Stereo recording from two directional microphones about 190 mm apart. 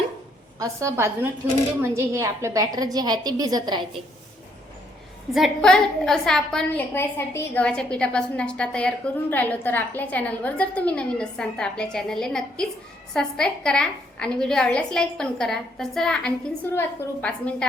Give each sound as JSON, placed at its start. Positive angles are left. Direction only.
{"t": 0.6, "sound": "a woman's voice", "side_deg": -15}
{"t": 5.3, "sound": "a woman's voice", "side_deg": 0}